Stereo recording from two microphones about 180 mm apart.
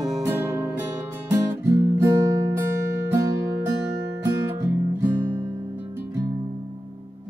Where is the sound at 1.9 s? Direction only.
15° right (ahead or behind).